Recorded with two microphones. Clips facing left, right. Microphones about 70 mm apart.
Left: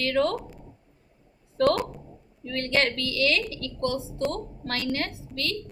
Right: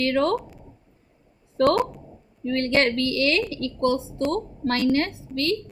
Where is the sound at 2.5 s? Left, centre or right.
Right.